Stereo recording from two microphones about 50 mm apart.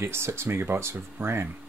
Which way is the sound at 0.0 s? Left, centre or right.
Right.